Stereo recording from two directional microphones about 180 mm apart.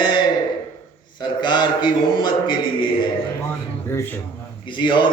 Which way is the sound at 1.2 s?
25° left (ahead or behind).